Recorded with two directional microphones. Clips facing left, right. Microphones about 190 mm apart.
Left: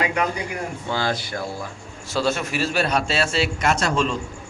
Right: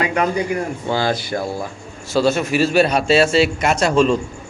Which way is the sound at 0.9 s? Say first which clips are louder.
Right 5 dB; 10° right (ahead or behind).